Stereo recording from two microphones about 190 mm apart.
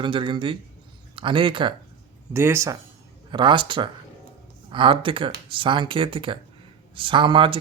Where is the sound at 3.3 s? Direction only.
25° right (ahead or behind).